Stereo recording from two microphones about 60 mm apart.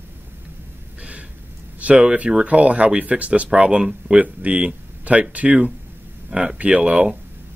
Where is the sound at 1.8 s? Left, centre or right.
Right.